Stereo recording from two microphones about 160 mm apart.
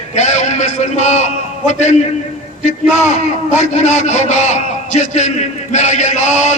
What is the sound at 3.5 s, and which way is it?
A man's voice, 45° left (ahead or behind).